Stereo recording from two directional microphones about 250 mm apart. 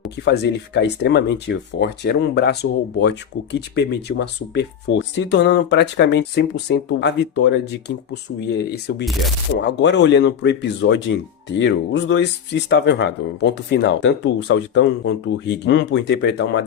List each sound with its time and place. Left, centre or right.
0.3 s speech: left